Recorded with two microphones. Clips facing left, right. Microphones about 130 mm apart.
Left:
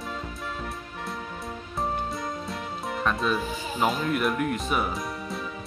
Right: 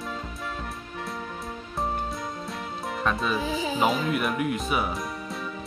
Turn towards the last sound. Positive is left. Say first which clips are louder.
# even
turn(degrees=0)  # may be behind; listen again after turning